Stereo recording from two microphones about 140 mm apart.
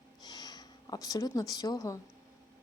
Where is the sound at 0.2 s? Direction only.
30° left (ahead or behind).